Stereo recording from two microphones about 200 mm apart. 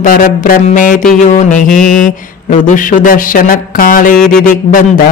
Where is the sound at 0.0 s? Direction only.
40° left (ahead or behind).